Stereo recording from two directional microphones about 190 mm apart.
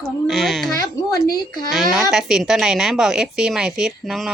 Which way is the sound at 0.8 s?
20° left (ahead or behind).